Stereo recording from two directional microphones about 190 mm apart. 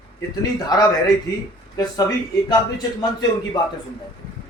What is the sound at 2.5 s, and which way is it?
Speech, 20° left (ahead or behind).